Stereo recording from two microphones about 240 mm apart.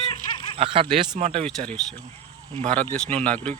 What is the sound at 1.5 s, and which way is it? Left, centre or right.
Speech, centre.